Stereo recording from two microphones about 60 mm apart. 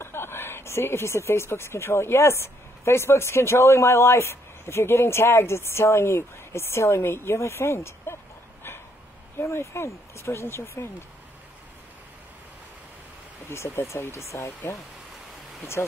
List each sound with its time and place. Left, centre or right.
0.0 s speech: left
9.4 s speech: left
13.5 s speech: left